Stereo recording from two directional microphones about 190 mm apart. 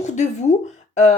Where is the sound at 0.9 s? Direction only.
35° left (ahead or behind).